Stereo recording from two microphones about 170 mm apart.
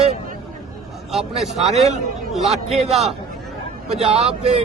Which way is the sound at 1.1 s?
Centre (ahead or behind).